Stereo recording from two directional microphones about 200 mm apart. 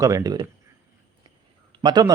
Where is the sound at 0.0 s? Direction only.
15° right (ahead or behind).